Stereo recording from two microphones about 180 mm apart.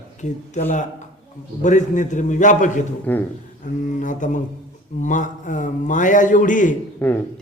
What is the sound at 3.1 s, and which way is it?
Speech, 10° left (ahead or behind).